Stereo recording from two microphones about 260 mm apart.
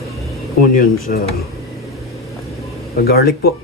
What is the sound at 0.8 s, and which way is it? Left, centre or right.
Speech, left.